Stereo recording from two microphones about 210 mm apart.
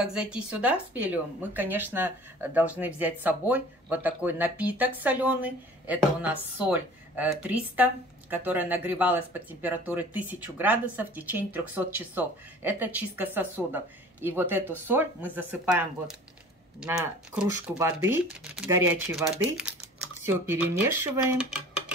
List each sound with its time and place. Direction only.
0.0 s speech: 5° right (ahead or behind)